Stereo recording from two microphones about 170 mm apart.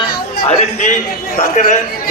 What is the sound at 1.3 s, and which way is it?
Speech, 45° left (ahead or behind).